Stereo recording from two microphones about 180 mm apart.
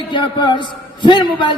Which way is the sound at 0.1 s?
25° left (ahead or behind).